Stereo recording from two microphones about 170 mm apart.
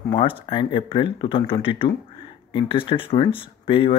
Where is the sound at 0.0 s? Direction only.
30° left (ahead or behind).